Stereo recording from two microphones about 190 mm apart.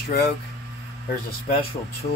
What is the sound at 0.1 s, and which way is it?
Speech, 55° left (ahead or behind).